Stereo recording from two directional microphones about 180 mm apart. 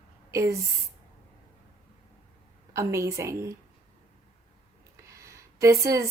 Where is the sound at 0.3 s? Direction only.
15° right (ahead or behind).